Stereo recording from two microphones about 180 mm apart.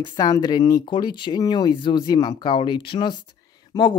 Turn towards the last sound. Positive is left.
turn(degrees=25)  # may be behind; listen again after turning